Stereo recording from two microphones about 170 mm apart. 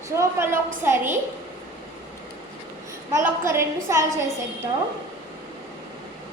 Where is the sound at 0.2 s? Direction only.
15° right (ahead or behind).